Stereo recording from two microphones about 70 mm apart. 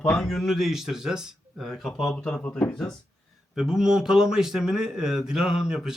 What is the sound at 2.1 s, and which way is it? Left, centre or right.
Speech, centre.